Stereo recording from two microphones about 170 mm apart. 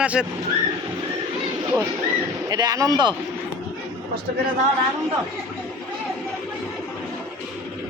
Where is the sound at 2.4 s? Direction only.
25° right (ahead or behind).